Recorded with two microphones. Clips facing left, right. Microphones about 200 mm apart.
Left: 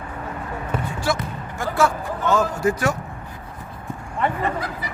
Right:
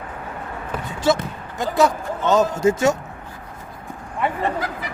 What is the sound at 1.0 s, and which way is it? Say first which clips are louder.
Speech: right 10 dB; 20° right (ahead or behind).